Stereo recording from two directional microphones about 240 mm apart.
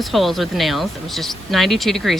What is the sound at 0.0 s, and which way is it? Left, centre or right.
Speech, centre.